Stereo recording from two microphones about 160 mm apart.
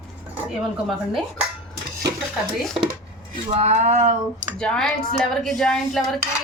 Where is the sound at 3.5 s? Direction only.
45° right (ahead or behind).